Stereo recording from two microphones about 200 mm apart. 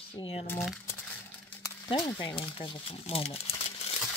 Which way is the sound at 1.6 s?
20° left (ahead or behind).